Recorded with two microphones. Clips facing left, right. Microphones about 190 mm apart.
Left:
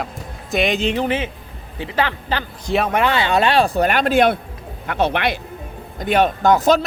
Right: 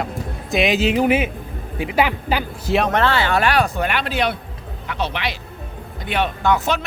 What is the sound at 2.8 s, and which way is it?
Speech, 15° left (ahead or behind).